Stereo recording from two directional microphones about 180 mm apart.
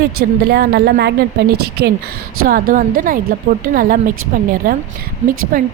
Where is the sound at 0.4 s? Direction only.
60° right (ahead or behind).